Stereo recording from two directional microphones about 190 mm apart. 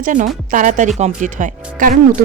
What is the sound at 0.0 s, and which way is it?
Speech, 45° right (ahead or behind).